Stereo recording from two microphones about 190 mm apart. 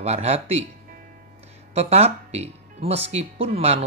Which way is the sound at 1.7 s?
35° right (ahead or behind).